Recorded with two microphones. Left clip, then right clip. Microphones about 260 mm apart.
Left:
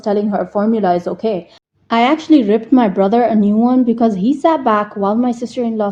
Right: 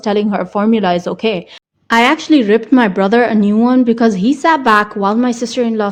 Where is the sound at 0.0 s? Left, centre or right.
Right.